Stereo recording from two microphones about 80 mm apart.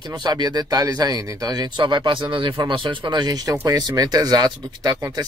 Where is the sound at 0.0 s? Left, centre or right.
Right.